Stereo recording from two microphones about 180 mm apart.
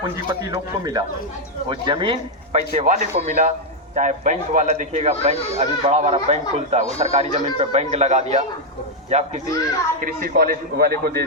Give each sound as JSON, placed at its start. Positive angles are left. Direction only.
{"t": 0.3, "sound": "speech", "side_deg": -20}
{"t": 10.0, "sound": "a man's voice", "side_deg": -50}